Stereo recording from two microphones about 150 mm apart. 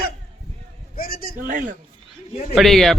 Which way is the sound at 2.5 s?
Centre (ahead or behind).